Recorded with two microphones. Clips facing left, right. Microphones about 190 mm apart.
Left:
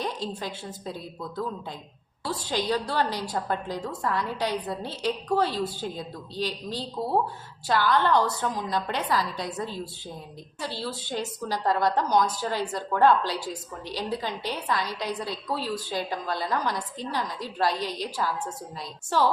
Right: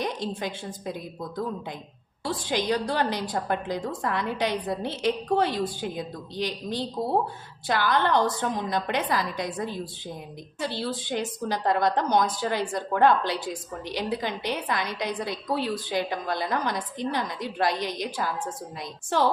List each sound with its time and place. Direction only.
0.0 s a woman's voice: 20° right (ahead or behind)
2.2 s a woman's voice: 20° right (ahead or behind)
2.7 s a woman's voice: 45° right (ahead or behind)
3.0 s a woman's voice: 20° right (ahead or behind)